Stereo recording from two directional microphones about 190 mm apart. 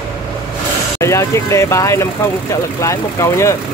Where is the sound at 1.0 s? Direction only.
15° left (ahead or behind).